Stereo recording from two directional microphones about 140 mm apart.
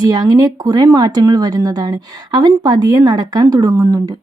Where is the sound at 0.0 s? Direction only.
30° right (ahead or behind).